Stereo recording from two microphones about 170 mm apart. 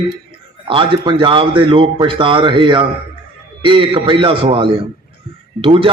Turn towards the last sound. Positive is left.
turn(degrees=-35)  # may be behind; listen again after turning